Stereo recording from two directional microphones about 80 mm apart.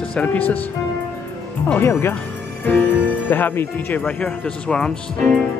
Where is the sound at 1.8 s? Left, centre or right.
Left.